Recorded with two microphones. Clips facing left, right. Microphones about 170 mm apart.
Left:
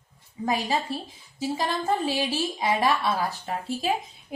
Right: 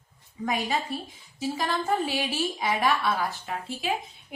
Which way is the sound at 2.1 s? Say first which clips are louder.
Left 2 dB; 30° left (ahead or behind).